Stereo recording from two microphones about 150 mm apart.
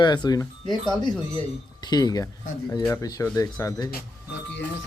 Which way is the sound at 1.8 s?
25° left (ahead or behind).